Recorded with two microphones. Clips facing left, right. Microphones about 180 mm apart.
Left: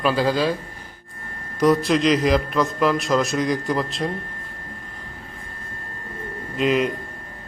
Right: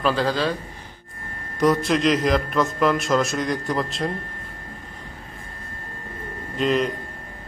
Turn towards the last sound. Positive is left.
turn(degrees=0)  # may be behind; listen again after turning